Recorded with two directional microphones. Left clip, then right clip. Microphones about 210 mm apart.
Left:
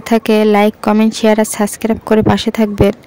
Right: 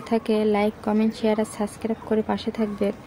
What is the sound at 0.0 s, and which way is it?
Speech, 50° left (ahead or behind).